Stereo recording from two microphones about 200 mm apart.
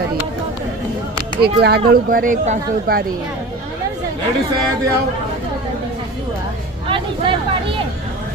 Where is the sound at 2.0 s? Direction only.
45° right (ahead or behind).